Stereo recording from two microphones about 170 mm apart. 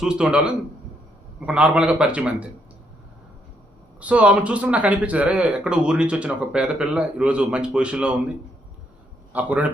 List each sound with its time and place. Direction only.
0.0 s a man's voice: 5° right (ahead or behind)
4.0 s speech: 10° right (ahead or behind)
9.3 s speech: 10° right (ahead or behind)